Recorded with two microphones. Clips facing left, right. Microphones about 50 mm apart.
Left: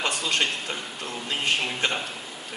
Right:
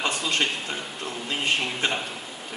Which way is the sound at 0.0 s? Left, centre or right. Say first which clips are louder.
Even; centre.